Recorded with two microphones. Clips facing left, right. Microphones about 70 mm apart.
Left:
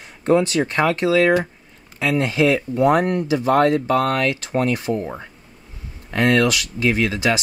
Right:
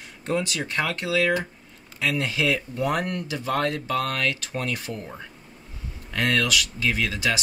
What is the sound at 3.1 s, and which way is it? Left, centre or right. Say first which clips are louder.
Speech: left 10 dB; centre.